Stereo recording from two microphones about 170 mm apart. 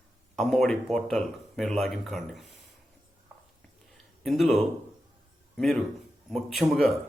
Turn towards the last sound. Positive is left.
turn(degrees=0)  # may be behind; listen again after turning